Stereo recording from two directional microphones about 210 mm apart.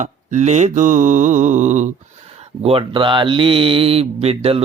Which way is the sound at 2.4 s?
30° right (ahead or behind).